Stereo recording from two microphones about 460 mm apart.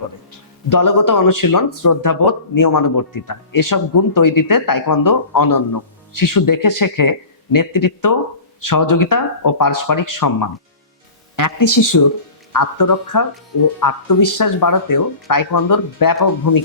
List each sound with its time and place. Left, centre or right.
0.7 s a man's voice: left